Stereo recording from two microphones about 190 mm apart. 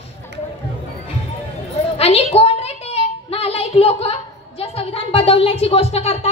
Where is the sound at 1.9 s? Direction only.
35° left (ahead or behind).